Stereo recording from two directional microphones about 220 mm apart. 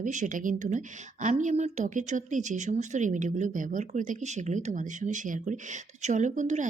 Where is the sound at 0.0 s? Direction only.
35° right (ahead or behind).